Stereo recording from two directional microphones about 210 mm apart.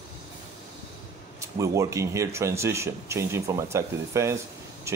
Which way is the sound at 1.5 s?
15° right (ahead or behind).